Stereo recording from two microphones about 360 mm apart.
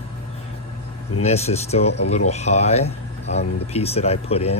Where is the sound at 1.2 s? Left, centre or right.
Centre.